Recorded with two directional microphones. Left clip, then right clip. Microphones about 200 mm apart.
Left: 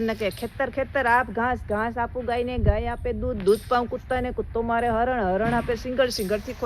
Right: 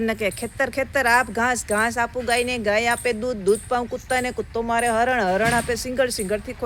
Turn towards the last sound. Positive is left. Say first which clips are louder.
# right 1 dB
turn(degrees=0)  # may be behind; listen again after turning